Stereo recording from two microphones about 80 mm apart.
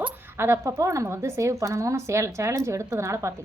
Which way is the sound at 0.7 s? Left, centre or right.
Right.